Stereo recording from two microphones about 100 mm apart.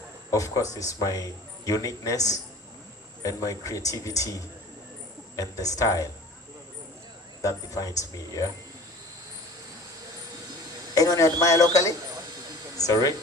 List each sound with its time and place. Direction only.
0.3 s a man's voice: 30° left (ahead or behind)
5.4 s a man's voice: 35° left (ahead or behind)
7.4 s a man's voice: 35° left (ahead or behind)
10.9 s a man's voice: 35° left (ahead or behind)